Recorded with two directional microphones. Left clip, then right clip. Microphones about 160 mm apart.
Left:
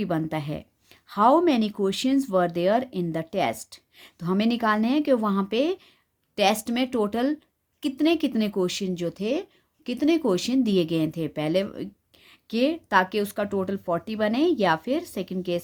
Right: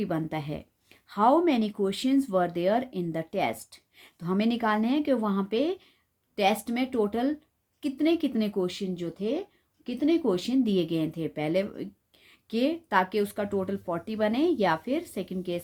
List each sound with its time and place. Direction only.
0.0 s a woman's voice: 30° left (ahead or behind)